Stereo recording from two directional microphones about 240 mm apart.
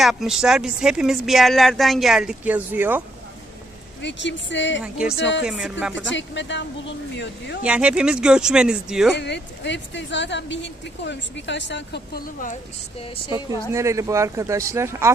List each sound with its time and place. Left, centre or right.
0.0 s speech: centre
4.0 s speech: left
4.8 s speech: centre
5.1 s speech: left
5.4 s speech: centre
5.9 s speech: left
7.6 s speech: centre
9.1 s speech: left
13.7 s speech: centre